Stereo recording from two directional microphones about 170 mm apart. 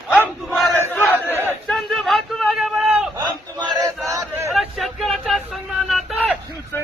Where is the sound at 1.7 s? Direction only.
Centre (ahead or behind).